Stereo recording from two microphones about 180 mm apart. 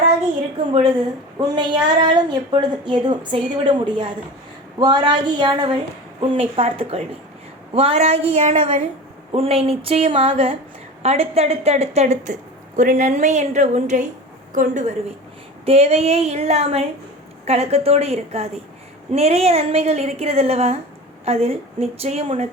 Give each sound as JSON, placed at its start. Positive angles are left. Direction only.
{"t": 1.4, "sound": "a woman's voice", "side_deg": -25}